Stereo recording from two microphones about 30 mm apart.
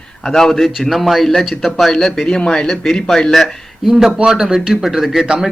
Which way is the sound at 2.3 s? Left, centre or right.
Left.